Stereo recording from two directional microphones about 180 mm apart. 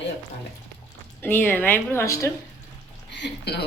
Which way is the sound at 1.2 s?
10° left (ahead or behind).